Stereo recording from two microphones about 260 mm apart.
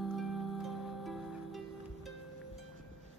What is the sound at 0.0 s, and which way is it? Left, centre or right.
Music, centre.